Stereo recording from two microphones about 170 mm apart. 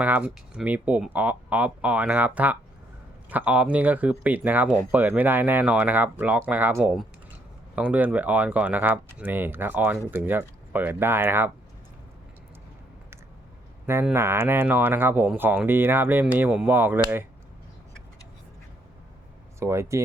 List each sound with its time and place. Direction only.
0.0 s speech: 10° right (ahead or behind)
13.8 s speech: 15° right (ahead or behind)
19.5 s speech: 15° right (ahead or behind)